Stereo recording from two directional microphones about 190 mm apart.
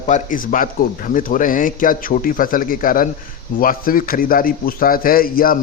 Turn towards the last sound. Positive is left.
turn(degrees=50)  # may be behind; listen again after turning